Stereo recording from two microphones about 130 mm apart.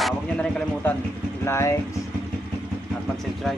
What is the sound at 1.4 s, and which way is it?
Vehicle, 20° left (ahead or behind).